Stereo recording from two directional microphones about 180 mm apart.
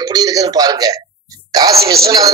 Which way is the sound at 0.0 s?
20° right (ahead or behind).